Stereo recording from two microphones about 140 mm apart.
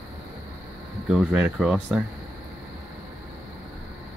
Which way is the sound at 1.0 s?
5° right (ahead or behind).